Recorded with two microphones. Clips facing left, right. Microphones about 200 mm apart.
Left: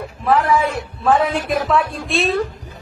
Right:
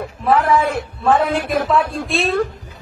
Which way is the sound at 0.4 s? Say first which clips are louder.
Right 1 dB; 55° right (ahead or behind).